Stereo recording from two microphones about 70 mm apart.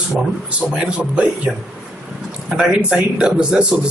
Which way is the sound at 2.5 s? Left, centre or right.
Centre.